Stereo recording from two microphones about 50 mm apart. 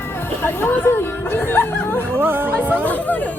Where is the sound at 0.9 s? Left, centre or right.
Left.